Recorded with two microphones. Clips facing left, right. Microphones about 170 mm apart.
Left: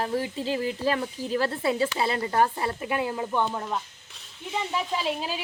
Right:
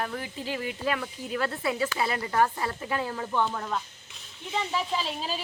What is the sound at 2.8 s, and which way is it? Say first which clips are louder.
Speech: left 3 dB; 15° left (ahead or behind).